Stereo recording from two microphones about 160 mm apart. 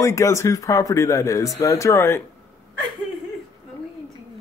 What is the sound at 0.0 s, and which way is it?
Speech, 20° left (ahead or behind).